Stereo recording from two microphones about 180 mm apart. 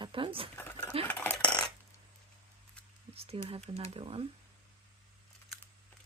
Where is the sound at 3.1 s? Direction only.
30° right (ahead or behind).